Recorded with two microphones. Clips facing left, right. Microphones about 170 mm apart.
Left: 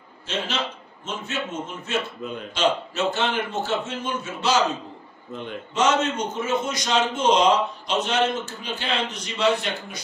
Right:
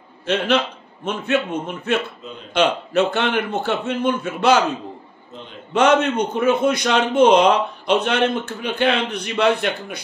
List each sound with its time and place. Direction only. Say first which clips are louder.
0.3 s a man's voice: right 9 dB; 60° right (ahead or behind)
5.7 s a man's voice: right 6 dB; 60° right (ahead or behind)